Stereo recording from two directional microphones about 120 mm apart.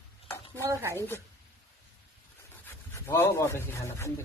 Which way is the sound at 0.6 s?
25° right (ahead or behind).